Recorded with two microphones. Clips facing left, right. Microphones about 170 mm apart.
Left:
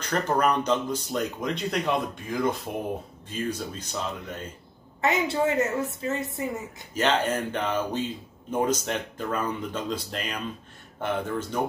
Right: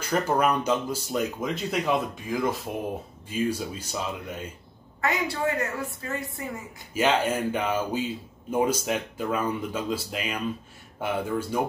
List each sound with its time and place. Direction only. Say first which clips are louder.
0.0 s speech: right 1 dB; 5° right (ahead or behind)
5.0 s a man's voice: left 3 dB; 20° left (ahead or behind)
6.9 s speech: right 1 dB; 10° right (ahead or behind)